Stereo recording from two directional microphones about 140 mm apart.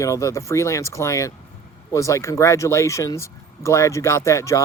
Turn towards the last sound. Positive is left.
turn(degrees=20)  # may be behind; listen again after turning